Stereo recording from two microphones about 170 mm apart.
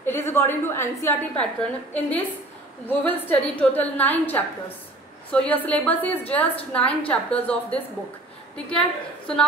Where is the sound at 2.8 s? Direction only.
10° left (ahead or behind).